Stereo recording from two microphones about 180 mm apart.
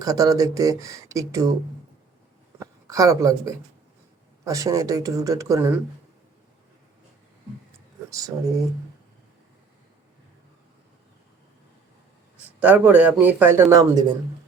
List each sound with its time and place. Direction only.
0.0 s speech: 20° right (ahead or behind)
2.6 s a woman's voice: 20° right (ahead or behind)
12.5 s speech: 5° right (ahead or behind)